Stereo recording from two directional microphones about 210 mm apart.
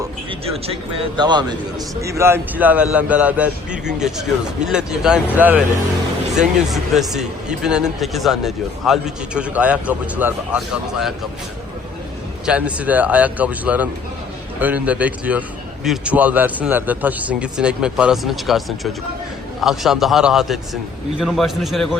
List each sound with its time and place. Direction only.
0.0 s a man's voice: 25° right (ahead or behind); by 11.3 s centre (ahead or behind)
12.5 s a man's voice: 5° right (ahead or behind)